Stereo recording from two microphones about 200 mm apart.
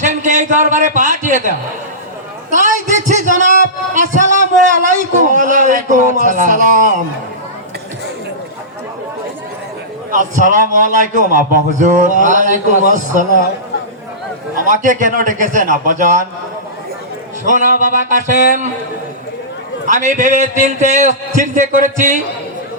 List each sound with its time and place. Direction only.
0.0 s a man's voice: 40° right (ahead or behind)
10.1 s a man's voice: 40° right (ahead or behind)
14.7 s a man's voice: 40° right (ahead or behind)
17.4 s a man's voice: 40° right (ahead or behind)
19.9 s a man's voice: 40° right (ahead or behind)